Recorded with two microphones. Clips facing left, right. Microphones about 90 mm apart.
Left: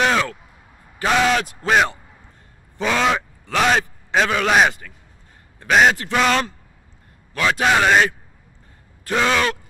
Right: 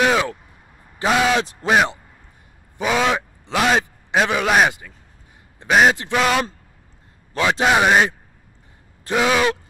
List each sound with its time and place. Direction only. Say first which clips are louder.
0.0 s a sound: right 1 dB; 5° right (ahead or behind)
1.0 s a man's voice: even; 10° right (ahead or behind)
1.4 s speech: right 3 dB; 25° right (ahead or behind)
2.8 s a man's voice: even; 10° right (ahead or behind)
7.3 s a man's voice: right 1 dB; 25° right (ahead or behind)
7.6 s speech: even; 10° right (ahead or behind)
9.1 s speech: right 1 dB; 10° right (ahead or behind)